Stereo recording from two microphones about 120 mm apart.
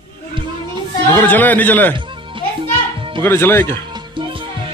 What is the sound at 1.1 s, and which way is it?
Speech, 15° left (ahead or behind).